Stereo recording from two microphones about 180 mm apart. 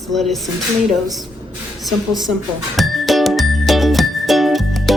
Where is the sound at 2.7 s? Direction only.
Centre (ahead or behind).